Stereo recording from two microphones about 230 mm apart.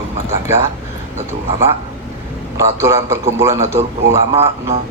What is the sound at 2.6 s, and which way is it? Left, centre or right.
A man's voice, centre.